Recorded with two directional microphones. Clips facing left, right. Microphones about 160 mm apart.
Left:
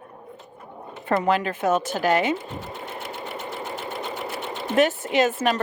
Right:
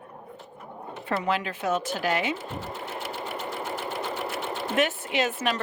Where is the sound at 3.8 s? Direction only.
15° left (ahead or behind).